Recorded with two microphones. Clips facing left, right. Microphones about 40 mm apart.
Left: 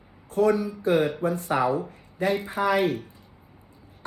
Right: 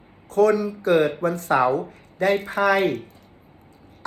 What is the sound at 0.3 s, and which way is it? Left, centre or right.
Speech, right.